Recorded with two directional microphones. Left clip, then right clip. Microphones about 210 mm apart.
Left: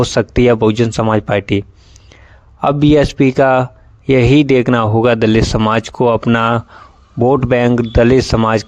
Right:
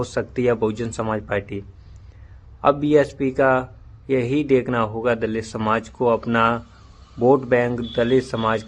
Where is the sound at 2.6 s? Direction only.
45° left (ahead or behind).